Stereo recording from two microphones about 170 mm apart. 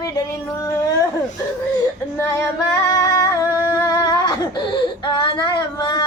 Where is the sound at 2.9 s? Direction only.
20° left (ahead or behind).